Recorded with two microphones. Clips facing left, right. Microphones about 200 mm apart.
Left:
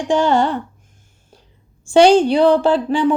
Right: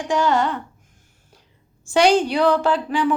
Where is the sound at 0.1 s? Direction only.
30° left (ahead or behind).